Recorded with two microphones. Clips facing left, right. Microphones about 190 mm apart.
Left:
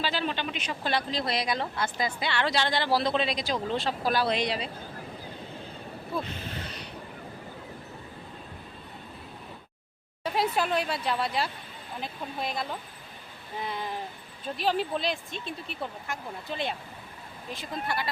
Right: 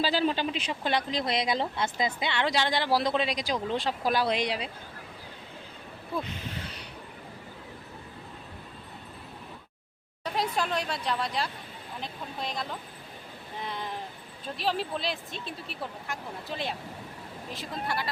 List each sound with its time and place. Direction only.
0.0 s speech: 35° right (ahead or behind); by 4.7 s 10° right (ahead or behind)
6.6 s a sound: 10° right (ahead or behind)
10.2 s speech: 5° left (ahead or behind)